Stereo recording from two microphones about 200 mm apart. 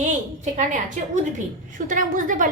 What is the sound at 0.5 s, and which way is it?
A woman's voice, 40° right (ahead or behind).